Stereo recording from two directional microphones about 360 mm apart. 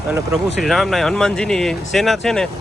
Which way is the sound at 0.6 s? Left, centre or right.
Centre.